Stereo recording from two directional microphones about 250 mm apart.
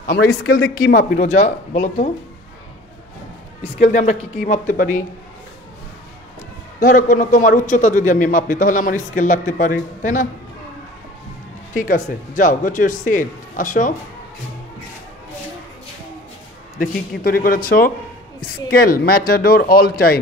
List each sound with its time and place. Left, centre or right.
0.5 s a man's voice: left
3.8 s speech: left
6.8 s a man's voice: left
11.7 s a man's voice: left
17.2 s a man's voice: left